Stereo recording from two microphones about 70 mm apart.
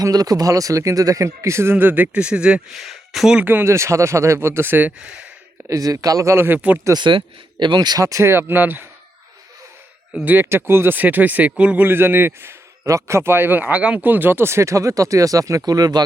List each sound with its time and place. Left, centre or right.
0.0 s a man's voice: right
1.7 s speech: right
2.9 s speech: centre
3.4 s speech: right
3.7 s a man's voice: right; by 5.1 s centre
5.6 s speech: right
6.9 s speech: right
8.0 s speech: right
8.3 s a man's voice: right
10.5 s speech: right; by 11.9 s centre
11.9 s a man's voice: right
15.6 s speech: right